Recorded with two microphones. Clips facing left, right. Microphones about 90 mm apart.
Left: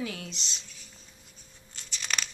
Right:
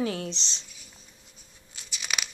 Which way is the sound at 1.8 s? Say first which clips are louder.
Even; 5° right (ahead or behind).